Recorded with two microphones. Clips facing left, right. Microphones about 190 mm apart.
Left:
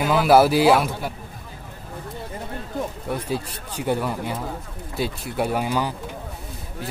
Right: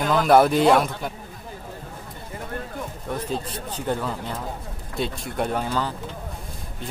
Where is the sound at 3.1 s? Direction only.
10° left (ahead or behind).